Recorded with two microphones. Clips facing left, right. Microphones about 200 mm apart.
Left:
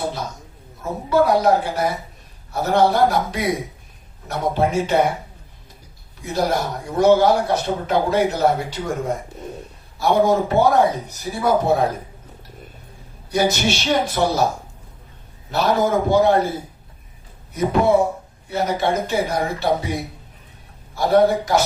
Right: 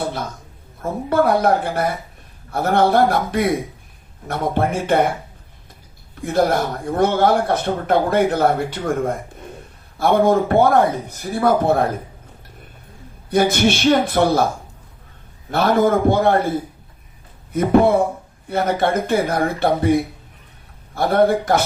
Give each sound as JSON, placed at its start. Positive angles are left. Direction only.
{"t": 0.8, "sound": "speech", "side_deg": -55}
{"t": 6.2, "sound": "speech", "side_deg": -55}
{"t": 13.3, "sound": "speech", "side_deg": -55}
{"t": 15.4, "sound": "speech", "side_deg": -55}
{"t": 17.5, "sound": "speech", "side_deg": -55}
{"t": 20.9, "sound": "speech", "side_deg": -55}